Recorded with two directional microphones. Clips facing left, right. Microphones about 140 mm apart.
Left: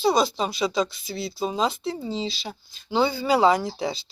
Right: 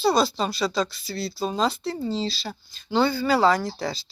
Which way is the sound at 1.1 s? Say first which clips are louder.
Even; 20° left (ahead or behind).